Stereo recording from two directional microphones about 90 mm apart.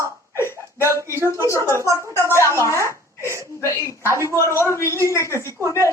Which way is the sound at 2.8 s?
30° right (ahead or behind).